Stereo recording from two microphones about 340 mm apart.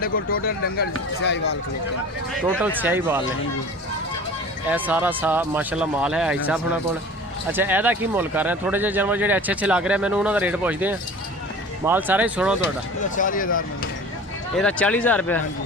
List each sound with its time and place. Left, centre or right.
0.0 s speech: left
2.4 s speech: centre
4.7 s speech: centre
13.1 s speech: left
14.5 s speech: centre